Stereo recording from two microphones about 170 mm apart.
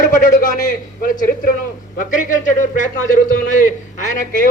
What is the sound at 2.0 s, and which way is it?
A man's voice, 50° left (ahead or behind).